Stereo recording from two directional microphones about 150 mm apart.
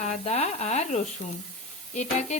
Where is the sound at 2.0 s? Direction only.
50° left (ahead or behind).